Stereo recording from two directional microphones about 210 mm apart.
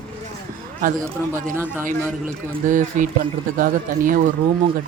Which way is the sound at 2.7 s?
40° right (ahead or behind).